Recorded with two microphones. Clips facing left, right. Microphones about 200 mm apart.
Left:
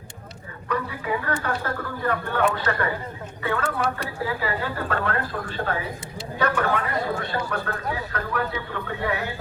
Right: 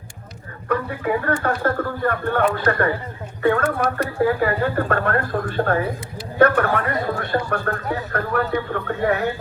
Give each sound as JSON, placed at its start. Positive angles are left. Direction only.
{"t": 0.7, "sound": "a man's voice", "side_deg": -50}